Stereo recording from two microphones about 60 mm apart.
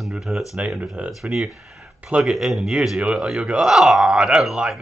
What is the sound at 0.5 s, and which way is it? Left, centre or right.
Speech, centre.